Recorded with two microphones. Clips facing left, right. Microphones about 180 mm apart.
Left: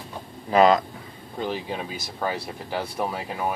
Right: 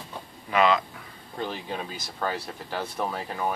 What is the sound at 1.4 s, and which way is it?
Speech, 15° left (ahead or behind).